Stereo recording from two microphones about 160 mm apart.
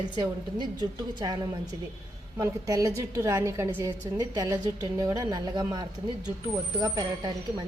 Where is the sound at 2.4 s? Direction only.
20° right (ahead or behind).